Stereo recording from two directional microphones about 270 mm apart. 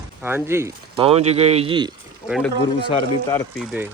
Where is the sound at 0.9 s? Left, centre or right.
Right.